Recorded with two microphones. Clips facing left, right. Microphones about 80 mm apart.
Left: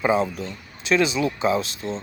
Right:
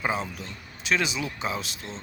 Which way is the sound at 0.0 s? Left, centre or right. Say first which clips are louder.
Left 8 dB; centre.